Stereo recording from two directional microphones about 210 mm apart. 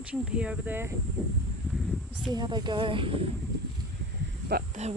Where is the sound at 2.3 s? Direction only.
20° right (ahead or behind).